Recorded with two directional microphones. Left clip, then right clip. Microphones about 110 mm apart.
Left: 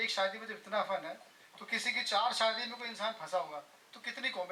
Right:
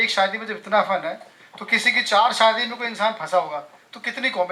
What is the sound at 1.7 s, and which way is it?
Speech, 20° right (ahead or behind).